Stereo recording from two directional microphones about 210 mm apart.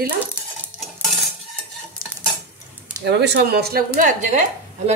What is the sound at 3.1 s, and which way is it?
Speech, 55° right (ahead or behind).